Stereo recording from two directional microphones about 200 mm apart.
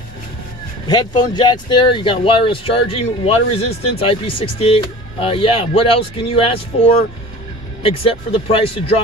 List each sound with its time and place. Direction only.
0.8 s speech: 20° left (ahead or behind)
7.8 s speech: 25° left (ahead or behind)